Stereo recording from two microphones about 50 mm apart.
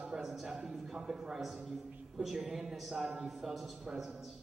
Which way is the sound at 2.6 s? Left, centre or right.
Centre.